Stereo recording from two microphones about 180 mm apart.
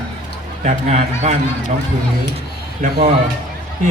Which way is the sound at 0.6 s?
40° right (ahead or behind).